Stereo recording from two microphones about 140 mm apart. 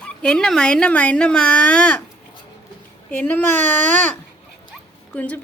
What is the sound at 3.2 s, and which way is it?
Speech, 15° left (ahead or behind).